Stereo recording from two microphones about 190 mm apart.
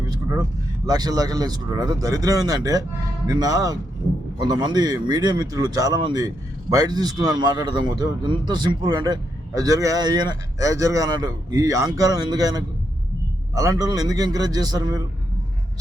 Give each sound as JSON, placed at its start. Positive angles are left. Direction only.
{"t": 0.1, "sound": "vehicle", "side_deg": -15}
{"t": 0.9, "sound": "a man's voice", "side_deg": -20}